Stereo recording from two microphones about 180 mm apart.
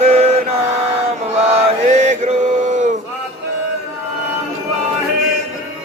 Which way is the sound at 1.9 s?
40° right (ahead or behind).